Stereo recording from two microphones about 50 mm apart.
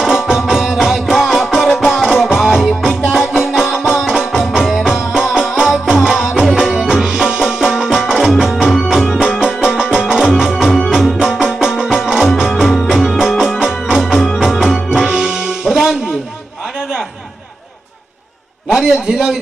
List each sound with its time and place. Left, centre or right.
0.0 s music: centre
9.4 s music: centre
14.8 s music: centre
16.7 s a sound: centre
18.7 s a sound: centre
19.0 s speech: centre